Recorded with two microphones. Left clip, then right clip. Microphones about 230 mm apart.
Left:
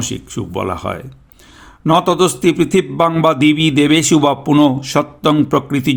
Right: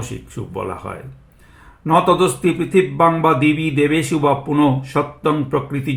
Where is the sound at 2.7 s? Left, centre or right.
Left.